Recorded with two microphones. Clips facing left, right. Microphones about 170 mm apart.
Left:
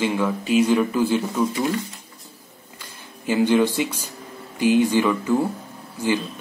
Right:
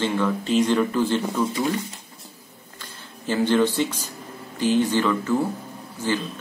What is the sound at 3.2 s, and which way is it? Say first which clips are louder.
Speech: left 2 dB; 10° left (ahead or behind).